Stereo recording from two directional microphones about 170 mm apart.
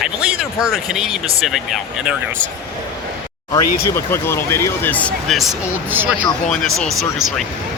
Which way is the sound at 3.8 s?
15° left (ahead or behind).